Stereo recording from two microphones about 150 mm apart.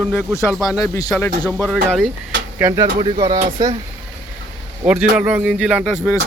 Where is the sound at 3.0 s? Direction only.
30° right (ahead or behind).